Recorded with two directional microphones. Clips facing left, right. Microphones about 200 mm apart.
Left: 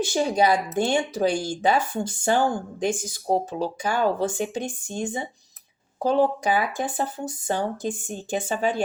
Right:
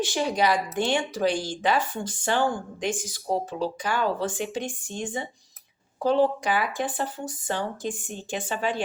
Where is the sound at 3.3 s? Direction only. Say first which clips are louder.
Left 3 dB; 45° left (ahead or behind).